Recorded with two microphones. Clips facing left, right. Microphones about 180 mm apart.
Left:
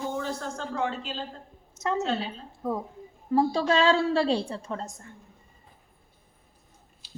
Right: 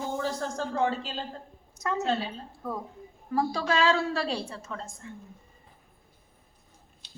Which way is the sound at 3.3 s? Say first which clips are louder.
Left 4 dB; 30° left (ahead or behind).